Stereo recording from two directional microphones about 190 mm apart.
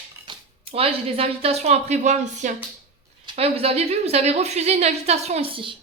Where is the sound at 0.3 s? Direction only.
30° right (ahead or behind).